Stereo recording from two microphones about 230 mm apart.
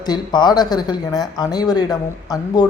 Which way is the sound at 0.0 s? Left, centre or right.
Centre.